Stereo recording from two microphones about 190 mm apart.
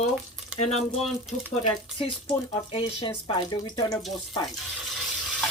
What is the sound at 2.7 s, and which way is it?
Speech, 30° left (ahead or behind).